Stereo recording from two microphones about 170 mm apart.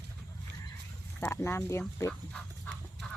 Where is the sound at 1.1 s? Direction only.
15° left (ahead or behind).